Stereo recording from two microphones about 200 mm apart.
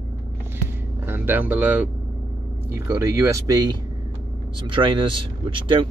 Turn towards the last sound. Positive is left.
turn(degrees=-25)  # may be behind; listen again after turning